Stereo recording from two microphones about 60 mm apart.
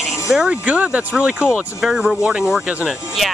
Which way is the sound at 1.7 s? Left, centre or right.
Centre.